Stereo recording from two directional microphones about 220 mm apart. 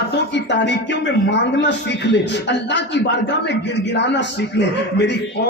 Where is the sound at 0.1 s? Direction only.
50° left (ahead or behind).